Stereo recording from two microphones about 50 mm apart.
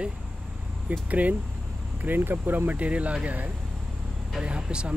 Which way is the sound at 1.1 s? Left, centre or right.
Right.